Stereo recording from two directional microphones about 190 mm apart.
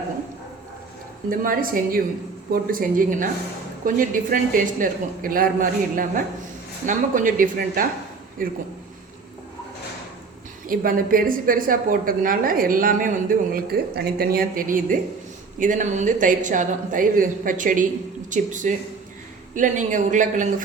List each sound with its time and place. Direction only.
1.3 s a woman's voice: 45° right (ahead or behind)
10.7 s a woman's voice: 50° right (ahead or behind)